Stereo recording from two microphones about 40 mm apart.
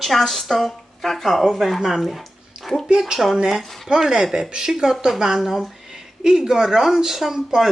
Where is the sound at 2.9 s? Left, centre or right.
Centre.